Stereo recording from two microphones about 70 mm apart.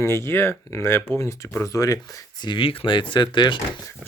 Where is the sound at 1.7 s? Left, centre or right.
Left.